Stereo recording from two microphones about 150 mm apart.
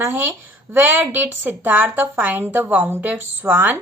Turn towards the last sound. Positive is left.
turn(degrees=-15)  # may be behind; listen again after turning